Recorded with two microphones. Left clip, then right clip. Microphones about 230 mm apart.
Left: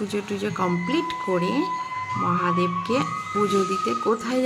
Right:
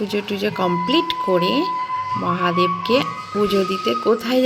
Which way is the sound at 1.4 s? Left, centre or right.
Centre.